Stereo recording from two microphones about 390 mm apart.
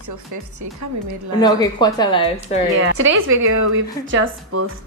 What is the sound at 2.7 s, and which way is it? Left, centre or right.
Speech, right.